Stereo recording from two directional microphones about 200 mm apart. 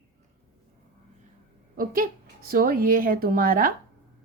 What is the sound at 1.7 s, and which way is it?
A woman's voice, 45° right (ahead or behind).